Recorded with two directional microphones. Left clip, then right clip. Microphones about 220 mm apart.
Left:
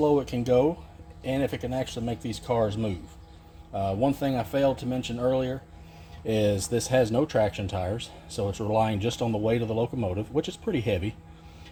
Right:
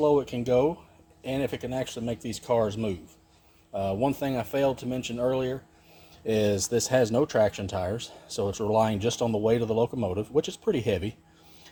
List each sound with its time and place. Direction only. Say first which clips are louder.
0.0 s speech: even; 20° right (ahead or behind); by 11.1 s 35° right (ahead or behind)